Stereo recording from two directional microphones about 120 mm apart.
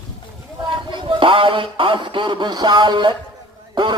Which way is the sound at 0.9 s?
45° right (ahead or behind).